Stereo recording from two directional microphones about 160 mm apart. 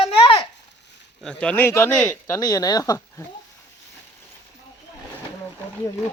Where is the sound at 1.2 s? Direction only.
5° left (ahead or behind); by 3.2 s 20° left (ahead or behind).